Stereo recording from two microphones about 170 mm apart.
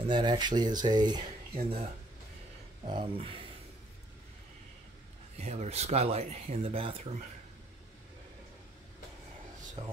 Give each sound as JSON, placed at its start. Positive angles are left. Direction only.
{"t": 0.0, "sound": "speech", "side_deg": -25}
{"t": 5.4, "sound": "speech", "side_deg": -40}
{"t": 9.8, "sound": "speech", "side_deg": -35}